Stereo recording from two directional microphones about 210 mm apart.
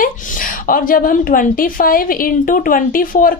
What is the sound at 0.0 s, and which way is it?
A woman's voice, 40° left (ahead or behind).